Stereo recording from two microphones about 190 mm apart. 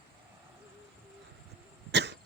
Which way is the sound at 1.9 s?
65° right (ahead or behind).